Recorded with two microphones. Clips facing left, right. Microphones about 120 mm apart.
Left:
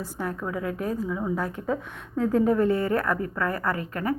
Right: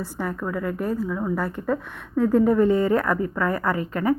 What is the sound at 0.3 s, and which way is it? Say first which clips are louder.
A woman's voice: right 3 dB; centre (ahead or behind).